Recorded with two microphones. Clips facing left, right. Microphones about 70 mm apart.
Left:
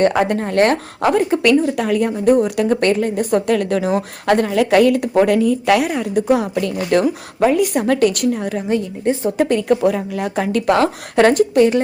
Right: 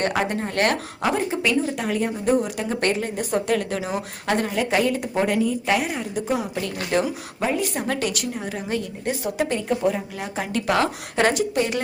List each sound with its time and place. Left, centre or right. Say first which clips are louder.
0.0 s a woman's voice: left 8 dB; left
1.1 s a woman's voice: left 9 dB; left
4.5 s a woman's voice: left 9 dB; left
5.9 s a woman's voice: left 9 dB; left
6.5 s a woman's voice: left 7 dB; left
8.5 s a woman's voice: left 7 dB; left
9.5 s a woman's voice: left 7 dB; left